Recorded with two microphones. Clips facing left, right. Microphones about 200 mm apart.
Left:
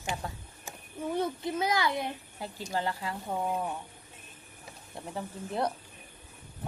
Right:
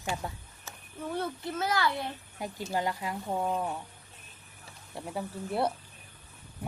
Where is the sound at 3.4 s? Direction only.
Centre (ahead or behind).